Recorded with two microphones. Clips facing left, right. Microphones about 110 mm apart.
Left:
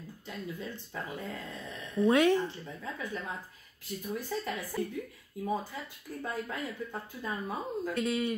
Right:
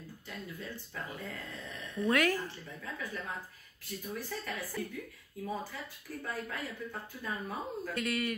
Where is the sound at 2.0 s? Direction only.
25° left (ahead or behind).